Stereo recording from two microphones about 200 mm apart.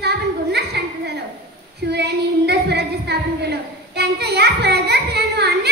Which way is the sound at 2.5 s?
55° right (ahead or behind).